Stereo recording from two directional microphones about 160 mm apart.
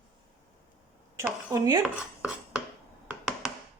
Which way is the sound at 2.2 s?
5° right (ahead or behind).